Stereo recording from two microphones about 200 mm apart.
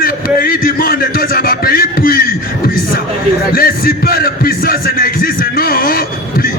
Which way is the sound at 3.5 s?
45° left (ahead or behind).